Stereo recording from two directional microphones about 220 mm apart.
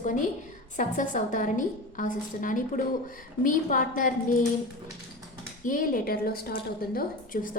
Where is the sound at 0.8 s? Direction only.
35° left (ahead or behind).